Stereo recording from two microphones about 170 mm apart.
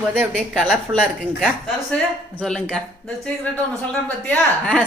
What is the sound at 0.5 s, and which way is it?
Speech, 5° left (ahead or behind).